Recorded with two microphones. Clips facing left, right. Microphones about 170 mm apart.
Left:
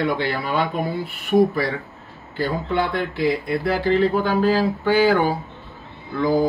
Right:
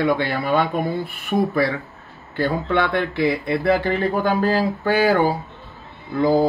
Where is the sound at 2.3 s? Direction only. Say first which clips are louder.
Right 2 dB; 65° right (ahead or behind).